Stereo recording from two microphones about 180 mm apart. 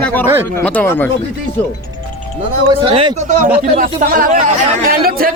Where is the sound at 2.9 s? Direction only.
30° right (ahead or behind).